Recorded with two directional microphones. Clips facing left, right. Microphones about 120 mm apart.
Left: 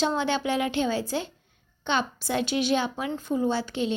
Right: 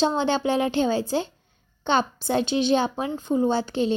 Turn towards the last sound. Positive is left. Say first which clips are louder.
# right 4 dB
turn(degrees=-30)  # may be behind; listen again after turning